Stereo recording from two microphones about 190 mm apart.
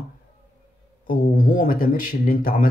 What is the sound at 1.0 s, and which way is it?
Speech, 45° left (ahead or behind).